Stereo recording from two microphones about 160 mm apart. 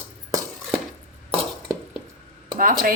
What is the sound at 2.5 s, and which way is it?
Speech, 60° right (ahead or behind).